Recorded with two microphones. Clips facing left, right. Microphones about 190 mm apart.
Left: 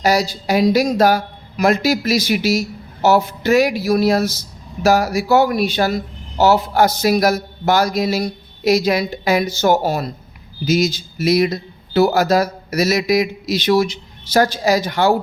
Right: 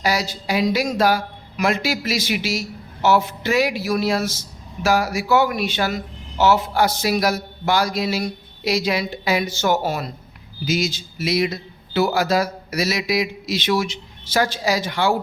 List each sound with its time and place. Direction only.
0.0 s speech: 40° left (ahead or behind)